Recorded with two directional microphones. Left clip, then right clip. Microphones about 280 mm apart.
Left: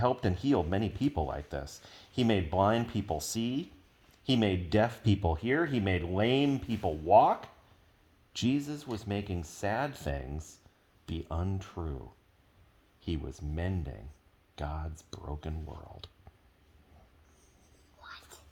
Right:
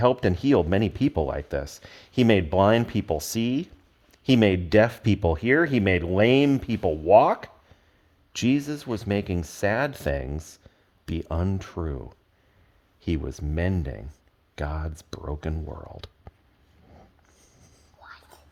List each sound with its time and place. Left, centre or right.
0.0 s speech: right
18.0 s whispering: right